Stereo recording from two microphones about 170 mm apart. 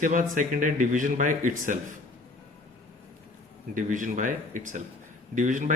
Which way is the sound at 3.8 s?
50° right (ahead or behind).